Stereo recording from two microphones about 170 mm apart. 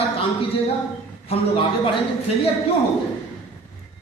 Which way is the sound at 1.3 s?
35° left (ahead or behind).